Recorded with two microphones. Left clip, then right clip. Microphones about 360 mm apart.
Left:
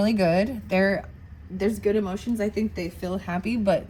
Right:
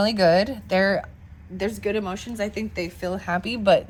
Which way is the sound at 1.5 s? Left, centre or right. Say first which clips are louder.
Left 2 dB; right.